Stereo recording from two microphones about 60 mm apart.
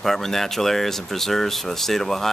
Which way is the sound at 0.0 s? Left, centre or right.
Centre.